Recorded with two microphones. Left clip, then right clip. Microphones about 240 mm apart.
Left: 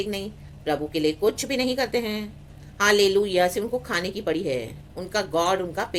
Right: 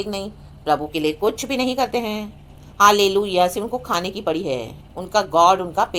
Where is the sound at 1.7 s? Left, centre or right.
Centre.